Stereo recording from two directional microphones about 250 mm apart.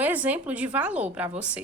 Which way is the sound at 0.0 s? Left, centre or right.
Centre.